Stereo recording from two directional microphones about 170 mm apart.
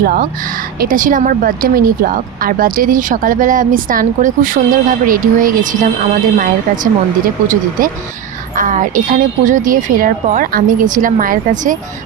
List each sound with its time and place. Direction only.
0.0 s speech: 60° right (ahead or behind)